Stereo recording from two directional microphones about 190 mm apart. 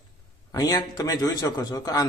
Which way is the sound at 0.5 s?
20° left (ahead or behind).